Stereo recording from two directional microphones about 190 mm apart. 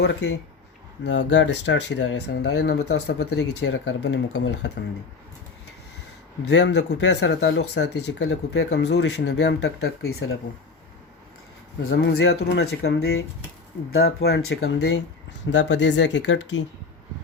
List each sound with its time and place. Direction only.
0.0 s speech: 65° left (ahead or behind)
6.5 s speech: 65° left (ahead or behind)
11.8 s speech: 80° left